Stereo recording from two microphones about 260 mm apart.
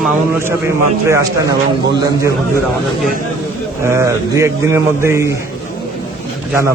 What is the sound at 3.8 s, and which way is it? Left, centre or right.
Speech, centre.